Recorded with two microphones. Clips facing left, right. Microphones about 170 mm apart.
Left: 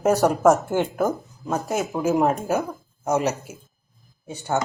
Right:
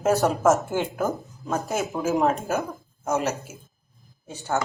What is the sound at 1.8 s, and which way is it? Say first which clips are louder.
Speech: left 2 dB; 15° left (ahead or behind).